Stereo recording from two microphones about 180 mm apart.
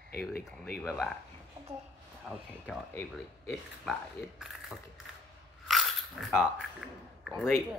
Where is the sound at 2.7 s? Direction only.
5° left (ahead or behind).